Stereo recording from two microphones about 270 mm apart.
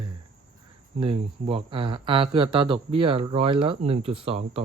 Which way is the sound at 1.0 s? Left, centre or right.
Right.